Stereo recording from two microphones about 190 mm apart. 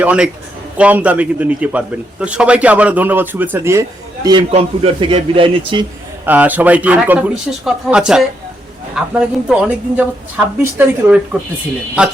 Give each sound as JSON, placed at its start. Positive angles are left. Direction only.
{"t": 0.0, "sound": "a woman's voice", "side_deg": -5}
{"t": 6.2, "sound": "a woman's voice", "side_deg": -10}